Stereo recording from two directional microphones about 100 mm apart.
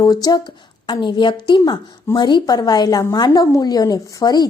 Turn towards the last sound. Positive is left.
turn(degrees=40)  # may be behind; listen again after turning